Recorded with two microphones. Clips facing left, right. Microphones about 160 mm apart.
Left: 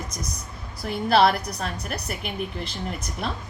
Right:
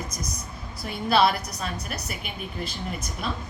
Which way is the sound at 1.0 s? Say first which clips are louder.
Left 2 dB; 55° left (ahead or behind).